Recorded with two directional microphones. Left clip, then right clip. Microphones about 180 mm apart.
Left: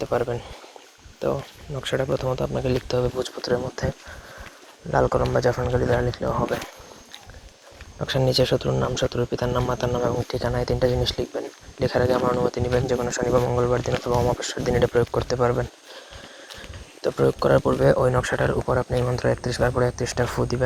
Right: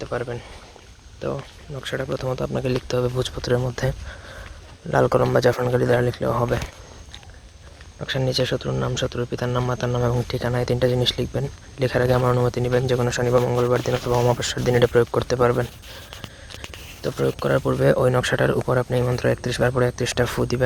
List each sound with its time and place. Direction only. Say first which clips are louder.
0.0 s speech: left 4 dB; 5° left (ahead or behind)
2.2 s speech: even; 15° right (ahead or behind)
3.8 s speech: right 2 dB; 55° right (ahead or behind)
5.0 s speech: right 5 dB; 50° right (ahead or behind)
7.9 s speech: left 2 dB; centre (ahead or behind)
10.2 s speech: right 1 dB; 35° right (ahead or behind)
14.8 s speech: right 3 dB; 25° right (ahead or behind)
15.3 s speech: right 3 dB; 40° right (ahead or behind)
17.2 s speech: left 2 dB; centre (ahead or behind)
17.8 s speech: right 1 dB; 35° right (ahead or behind)
20.2 s speech: even; 25° right (ahead or behind)